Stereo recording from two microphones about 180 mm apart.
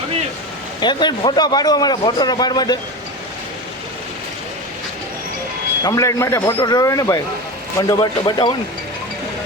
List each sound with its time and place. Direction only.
0.8 s a man's voice: 25° left (ahead or behind)
5.8 s a man's voice: 20° left (ahead or behind)